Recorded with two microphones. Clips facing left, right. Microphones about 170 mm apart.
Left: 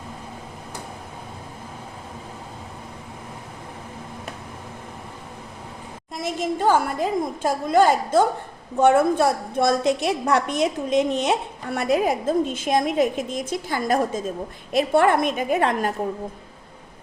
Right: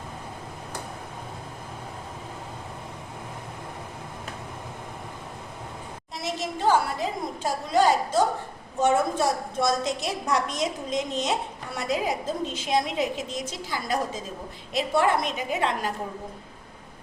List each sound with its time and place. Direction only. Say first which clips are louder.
6.1 s a woman's voice: left 6 dB; 50° left (ahead or behind)